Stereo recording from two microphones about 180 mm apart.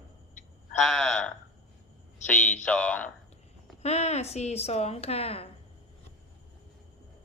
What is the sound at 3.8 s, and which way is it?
A woman's voice, 35° left (ahead or behind).